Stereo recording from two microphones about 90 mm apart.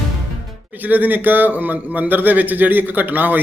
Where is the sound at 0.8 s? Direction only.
20° right (ahead or behind).